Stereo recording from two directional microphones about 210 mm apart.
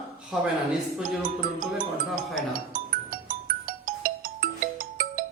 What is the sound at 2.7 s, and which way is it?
Music, 40° right (ahead or behind).